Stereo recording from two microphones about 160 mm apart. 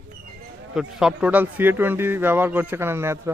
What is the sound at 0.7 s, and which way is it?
Speech, 5° right (ahead or behind).